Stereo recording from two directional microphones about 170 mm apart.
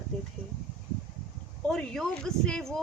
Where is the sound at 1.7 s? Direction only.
5° left (ahead or behind).